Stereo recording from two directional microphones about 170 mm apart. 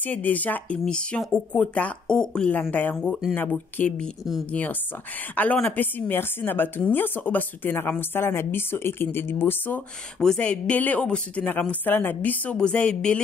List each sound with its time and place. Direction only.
0.0 s a woman's voice: 10° left (ahead or behind)